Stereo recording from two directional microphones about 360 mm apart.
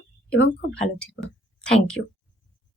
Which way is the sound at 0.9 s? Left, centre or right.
Centre.